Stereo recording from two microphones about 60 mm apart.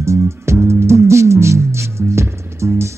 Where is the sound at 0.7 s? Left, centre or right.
Right.